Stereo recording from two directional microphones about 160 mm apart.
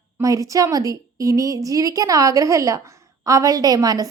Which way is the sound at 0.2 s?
20° right (ahead or behind).